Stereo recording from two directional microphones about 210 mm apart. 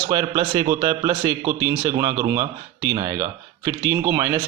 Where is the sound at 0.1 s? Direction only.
20° right (ahead or behind).